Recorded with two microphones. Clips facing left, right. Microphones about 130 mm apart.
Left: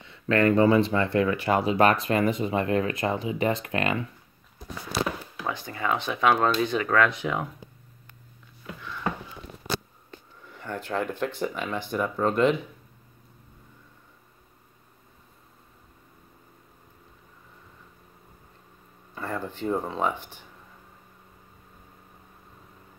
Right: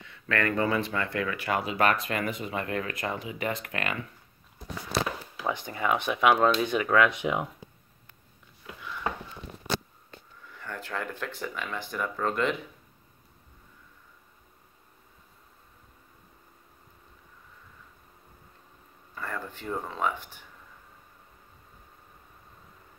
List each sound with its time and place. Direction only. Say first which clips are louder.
0.0 s speech: left 7 dB; 25° left (ahead or behind)
5.4 s speech: right 1 dB; 15° right (ahead or behind)
10.5 s speech: left 6 dB; 25° left (ahead or behind)
19.1 s speech: left 4 dB; 25° left (ahead or behind)